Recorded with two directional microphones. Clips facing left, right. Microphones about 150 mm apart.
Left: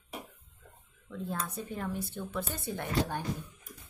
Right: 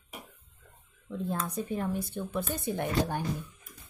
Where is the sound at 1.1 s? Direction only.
15° right (ahead or behind).